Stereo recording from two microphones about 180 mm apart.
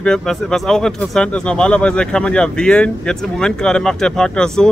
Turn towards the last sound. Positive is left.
turn(degrees=5)  # may be behind; listen again after turning